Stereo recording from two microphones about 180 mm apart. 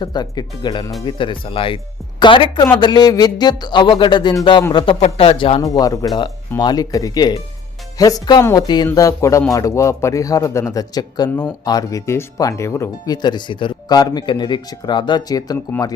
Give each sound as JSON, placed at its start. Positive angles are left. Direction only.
{"t": 0.0, "sound": "speech", "side_deg": 25}
{"t": 5.6, "sound": "speech", "side_deg": 20}